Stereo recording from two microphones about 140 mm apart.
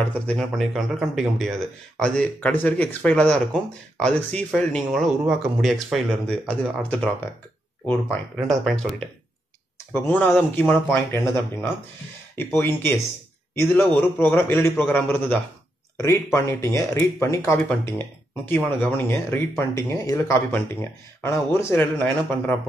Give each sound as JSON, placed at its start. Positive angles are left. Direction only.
{"t": 0.3, "sound": "speech", "side_deg": 0}
{"t": 8.5, "sound": "speech", "side_deg": 0}
{"t": 10.0, "sound": "speech", "side_deg": 15}